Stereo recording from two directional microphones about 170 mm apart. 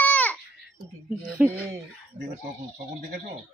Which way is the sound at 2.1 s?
55° right (ahead or behind).